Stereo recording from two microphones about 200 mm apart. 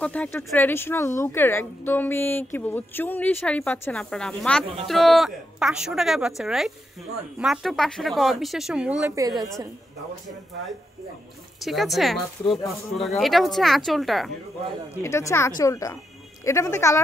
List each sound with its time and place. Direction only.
0.0 s speech: 5° left (ahead or behind); by 9.3 s 15° right (ahead or behind)
11.6 s speech: centre (ahead or behind)
15.0 s speech: 15° left (ahead or behind)